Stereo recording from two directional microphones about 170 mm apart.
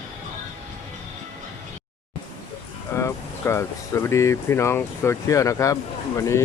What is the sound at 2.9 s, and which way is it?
Speech, 15° left (ahead or behind).